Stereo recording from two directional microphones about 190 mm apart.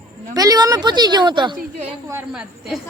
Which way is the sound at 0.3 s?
20° right (ahead or behind).